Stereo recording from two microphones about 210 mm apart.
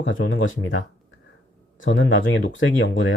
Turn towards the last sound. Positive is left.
turn(degrees=65)  # may be behind; listen again after turning